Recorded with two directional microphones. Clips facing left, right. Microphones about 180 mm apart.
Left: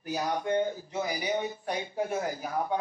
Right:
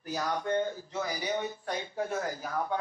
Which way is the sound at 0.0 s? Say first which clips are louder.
Left 2 dB; 15° left (ahead or behind).